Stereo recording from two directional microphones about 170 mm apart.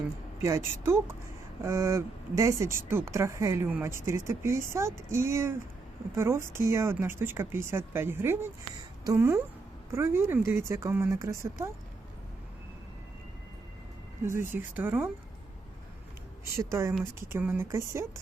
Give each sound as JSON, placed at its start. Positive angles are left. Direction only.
{"t": 0.4, "sound": "speech", "side_deg": -15}
{"t": 14.3, "sound": "speech", "side_deg": -15}
{"t": 16.6, "sound": "speech", "side_deg": -15}